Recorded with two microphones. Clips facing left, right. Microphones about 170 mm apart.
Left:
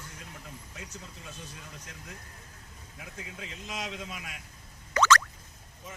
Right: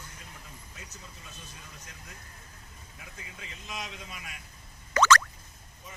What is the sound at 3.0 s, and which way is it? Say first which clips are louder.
A man's voice: left 5 dB; 65° left (ahead or behind).